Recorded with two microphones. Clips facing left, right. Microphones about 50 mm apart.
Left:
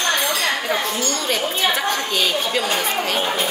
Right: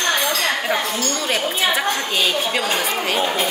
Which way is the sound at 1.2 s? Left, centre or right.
Centre.